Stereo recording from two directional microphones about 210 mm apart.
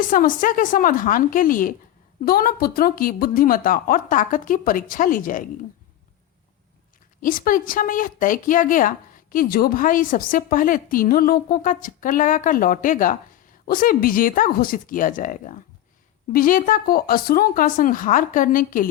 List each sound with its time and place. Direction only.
0.1 s speech: 40° left (ahead or behind)
7.2 s speech: 40° left (ahead or behind)